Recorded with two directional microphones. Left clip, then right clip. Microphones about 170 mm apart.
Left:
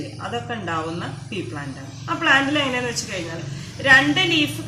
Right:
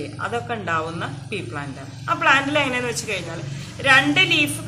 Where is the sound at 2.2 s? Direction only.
20° right (ahead or behind).